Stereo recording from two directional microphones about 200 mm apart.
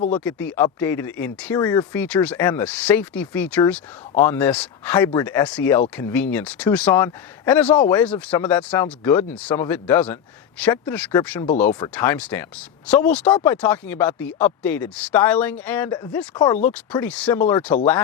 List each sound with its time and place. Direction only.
0.3 s speech: 5° left (ahead or behind)
1.5 s speech: 20° left (ahead or behind)
1.9 s speech: 10° left (ahead or behind)
16.3 s speech: 20° left (ahead or behind)
16.9 s speech: 5° left (ahead or behind)